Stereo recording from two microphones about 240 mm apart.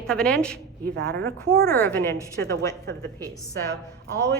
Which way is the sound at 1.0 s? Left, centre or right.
Right.